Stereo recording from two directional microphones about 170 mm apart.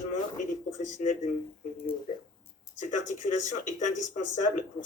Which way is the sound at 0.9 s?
45° left (ahead or behind).